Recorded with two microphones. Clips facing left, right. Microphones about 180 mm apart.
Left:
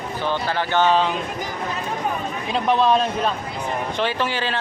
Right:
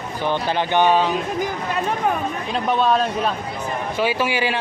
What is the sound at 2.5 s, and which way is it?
Speech, centre (ahead or behind).